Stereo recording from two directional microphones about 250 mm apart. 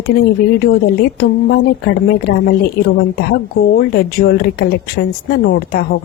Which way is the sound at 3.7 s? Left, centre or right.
Left.